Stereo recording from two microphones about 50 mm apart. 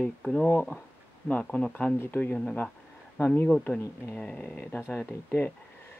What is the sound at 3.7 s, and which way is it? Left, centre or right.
Speech, left.